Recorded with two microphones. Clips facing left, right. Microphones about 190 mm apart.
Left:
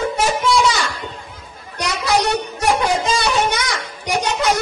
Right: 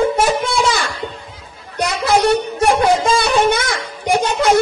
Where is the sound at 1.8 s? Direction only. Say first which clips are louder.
Right 4 dB; 55° right (ahead or behind).